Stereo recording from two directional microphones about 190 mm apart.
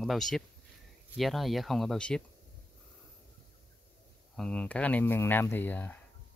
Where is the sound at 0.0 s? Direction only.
Centre (ahead or behind).